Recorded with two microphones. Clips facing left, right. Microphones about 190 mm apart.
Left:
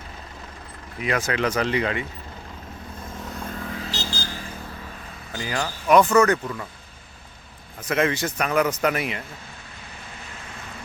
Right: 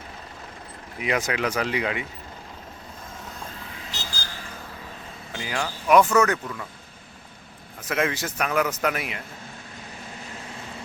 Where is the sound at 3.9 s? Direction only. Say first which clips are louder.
Left 6 dB; 30° left (ahead or behind).